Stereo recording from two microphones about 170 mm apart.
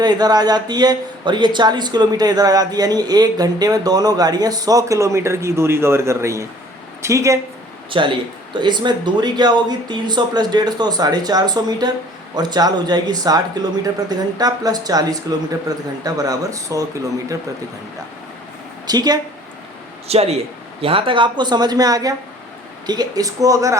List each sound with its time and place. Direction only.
0.0 s a man's voice: 25° right (ahead or behind)
7.9 s a man's voice: 30° right (ahead or behind)
18.9 s a man's voice: 25° right (ahead or behind)
20.1 s a man's voice: 35° right (ahead or behind); by 23.7 s 20° right (ahead or behind)